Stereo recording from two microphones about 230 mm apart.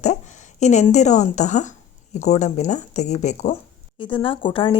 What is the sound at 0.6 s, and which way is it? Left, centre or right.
A woman's voice, left.